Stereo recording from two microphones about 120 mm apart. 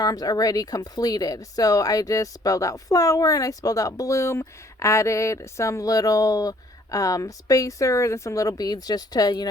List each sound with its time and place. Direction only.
0.0 s speech: 30° left (ahead or behind)